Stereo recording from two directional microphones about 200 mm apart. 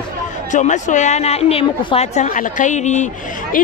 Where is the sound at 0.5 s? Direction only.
35° left (ahead or behind).